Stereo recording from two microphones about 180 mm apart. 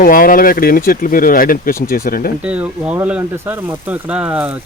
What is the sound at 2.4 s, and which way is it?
Speech, 5° right (ahead or behind).